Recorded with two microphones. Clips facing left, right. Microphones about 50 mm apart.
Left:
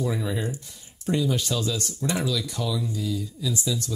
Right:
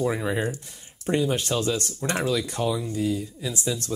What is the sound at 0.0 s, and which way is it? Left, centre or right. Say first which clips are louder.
Speech: right 3 dB; right.